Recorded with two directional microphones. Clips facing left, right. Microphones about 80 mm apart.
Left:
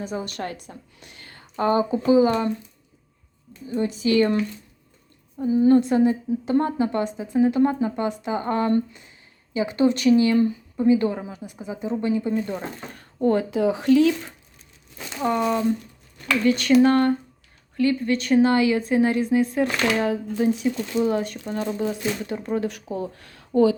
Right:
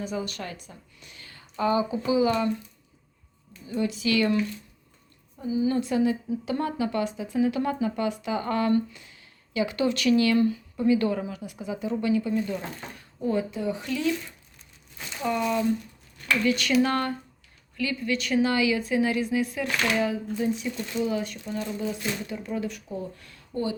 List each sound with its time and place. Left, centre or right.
0.0 s a woman's voice: left
3.7 s speech: left
5.4 s a woman's voice: left
5.7 s a woman's voice: left
12.5 s a woman's voice: left
13.2 s speech: left
15.2 s a woman's voice: left
22.9 s speech: left